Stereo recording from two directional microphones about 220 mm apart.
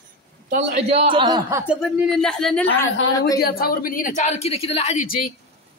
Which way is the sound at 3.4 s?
40° left (ahead or behind).